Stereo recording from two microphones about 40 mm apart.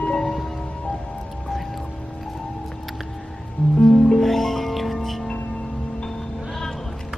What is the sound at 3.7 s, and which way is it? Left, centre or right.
Music, centre.